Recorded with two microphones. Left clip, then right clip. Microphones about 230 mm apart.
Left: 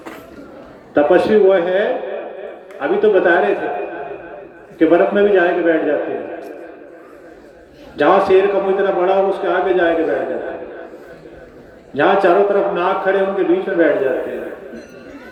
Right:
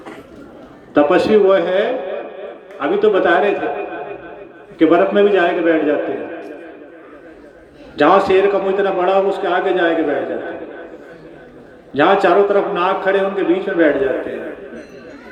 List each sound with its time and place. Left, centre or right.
0.9 s a man's voice: right
4.8 s a man's voice: right
7.9 s a man's voice: right
11.9 s a man's voice: right